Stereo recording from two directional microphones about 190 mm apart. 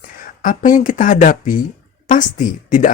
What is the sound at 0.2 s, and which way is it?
Speech, 45° left (ahead or behind).